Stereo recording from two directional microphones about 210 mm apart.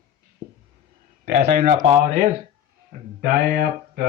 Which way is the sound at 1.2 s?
40° right (ahead or behind).